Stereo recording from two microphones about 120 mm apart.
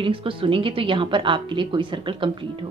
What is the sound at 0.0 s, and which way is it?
Speech, 45° right (ahead or behind).